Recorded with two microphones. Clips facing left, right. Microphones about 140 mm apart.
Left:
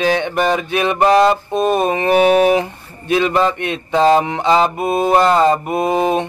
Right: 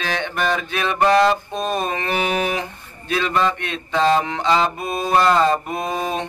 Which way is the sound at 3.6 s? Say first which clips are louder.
Left 7 dB; 15° left (ahead or behind).